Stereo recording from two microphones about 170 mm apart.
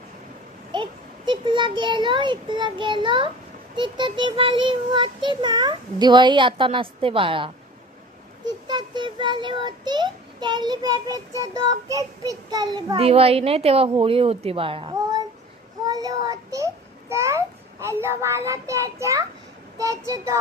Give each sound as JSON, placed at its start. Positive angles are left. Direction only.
{"t": 0.7, "sound": "a child's voice", "side_deg": -25}
{"t": 13.0, "sound": "a woman's voice", "side_deg": -35}
{"t": 15.9, "sound": "child singing", "side_deg": -20}
{"t": 17.1, "sound": "a child's voice", "side_deg": -15}